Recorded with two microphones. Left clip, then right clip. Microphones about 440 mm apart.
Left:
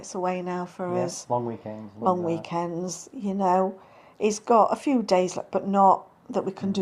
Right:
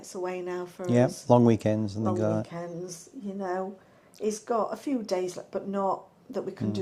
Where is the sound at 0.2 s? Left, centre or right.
Left.